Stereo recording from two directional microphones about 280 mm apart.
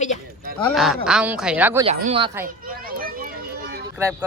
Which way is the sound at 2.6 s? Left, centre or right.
Right.